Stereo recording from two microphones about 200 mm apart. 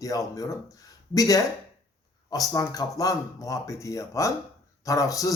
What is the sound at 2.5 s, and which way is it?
Speech, 15° left (ahead or behind).